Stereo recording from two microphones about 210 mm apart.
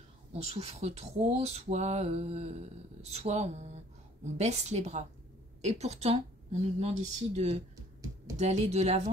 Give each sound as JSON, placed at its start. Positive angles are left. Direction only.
{"t": 0.3, "sound": "speech", "side_deg": -30}